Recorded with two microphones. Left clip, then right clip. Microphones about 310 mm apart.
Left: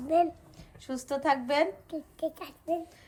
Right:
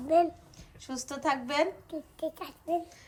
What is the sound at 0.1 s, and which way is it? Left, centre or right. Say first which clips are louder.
A child's voice: right 1 dB; centre.